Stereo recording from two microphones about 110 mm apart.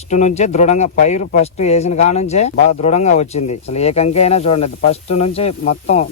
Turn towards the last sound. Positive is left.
turn(degrees=75)  # may be behind; listen again after turning